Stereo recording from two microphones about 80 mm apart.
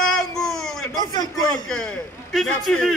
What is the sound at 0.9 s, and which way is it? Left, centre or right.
Speech, left.